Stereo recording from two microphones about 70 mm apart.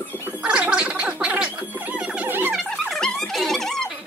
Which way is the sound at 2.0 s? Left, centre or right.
Centre.